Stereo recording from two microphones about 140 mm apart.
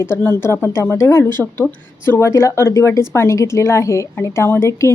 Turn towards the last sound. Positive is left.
turn(degrees=20)  # may be behind; listen again after turning